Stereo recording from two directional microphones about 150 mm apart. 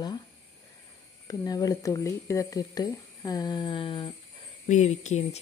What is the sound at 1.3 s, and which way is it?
Speech, 25° left (ahead or behind).